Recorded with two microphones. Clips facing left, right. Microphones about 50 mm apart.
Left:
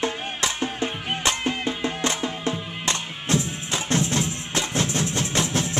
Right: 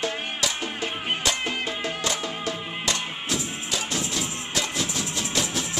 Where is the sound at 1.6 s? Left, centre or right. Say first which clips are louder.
Left 3 dB; left.